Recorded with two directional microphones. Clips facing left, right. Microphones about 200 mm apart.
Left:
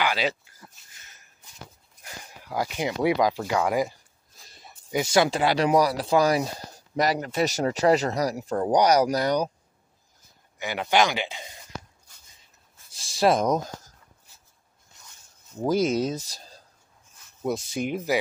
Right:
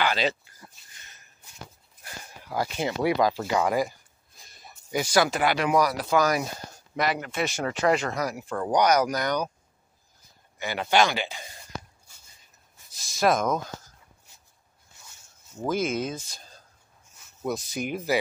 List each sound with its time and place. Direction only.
0.0 s speech: 10° left (ahead or behind)
2.4 s speech: 15° left (ahead or behind)
4.5 s a sound: 25° left (ahead or behind)
4.8 s speech: 20° left (ahead or behind)
10.6 s speech: 15° left (ahead or behind)
12.9 s speech: 30° left (ahead or behind)
15.6 s speech: 35° left (ahead or behind)